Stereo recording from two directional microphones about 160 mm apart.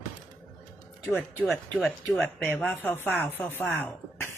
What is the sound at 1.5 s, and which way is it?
Speech, centre (ahead or behind).